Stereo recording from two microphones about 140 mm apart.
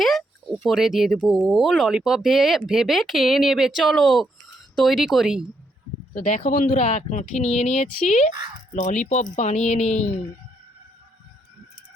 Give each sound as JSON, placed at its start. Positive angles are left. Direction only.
{"t": 0.0, "sound": "speech", "side_deg": 0}
{"t": 6.1, "sound": "a woman's voice", "side_deg": 60}